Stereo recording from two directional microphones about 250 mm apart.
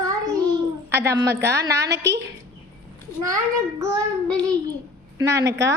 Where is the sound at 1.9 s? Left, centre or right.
Right.